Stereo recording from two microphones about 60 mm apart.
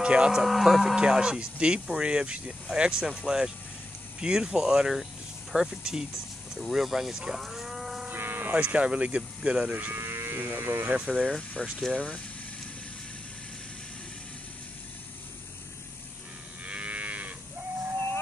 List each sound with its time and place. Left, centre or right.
0.0 s cattle: centre
8.1 s buzz: right
8.5 s speech: centre
9.8 s speech: right
10.9 s speech: right
11.6 s speech: centre
16.6 s moo: right